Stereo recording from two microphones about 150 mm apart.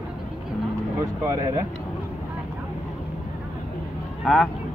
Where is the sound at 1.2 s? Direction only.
20° right (ahead or behind).